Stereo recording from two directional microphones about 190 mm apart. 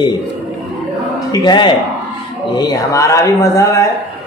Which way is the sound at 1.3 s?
25° left (ahead or behind).